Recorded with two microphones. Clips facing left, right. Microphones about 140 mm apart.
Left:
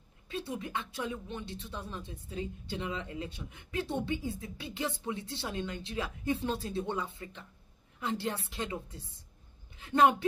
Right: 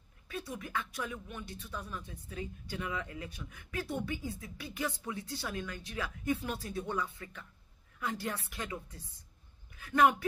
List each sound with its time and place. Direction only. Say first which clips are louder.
0.3 s speech: left 2 dB; 25° left (ahead or behind)